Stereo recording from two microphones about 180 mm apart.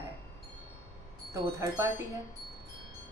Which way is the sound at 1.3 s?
15° right (ahead or behind).